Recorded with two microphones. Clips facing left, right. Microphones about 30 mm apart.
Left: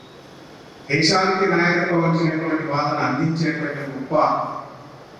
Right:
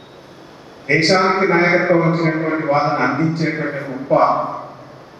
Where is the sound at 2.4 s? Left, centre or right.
Centre.